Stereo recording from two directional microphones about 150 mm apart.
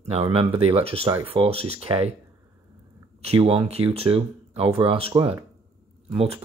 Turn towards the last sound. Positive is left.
turn(degrees=-40)  # may be behind; listen again after turning